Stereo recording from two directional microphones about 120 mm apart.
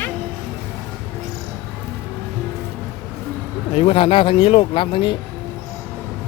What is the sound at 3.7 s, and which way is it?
Speech, 55° left (ahead or behind).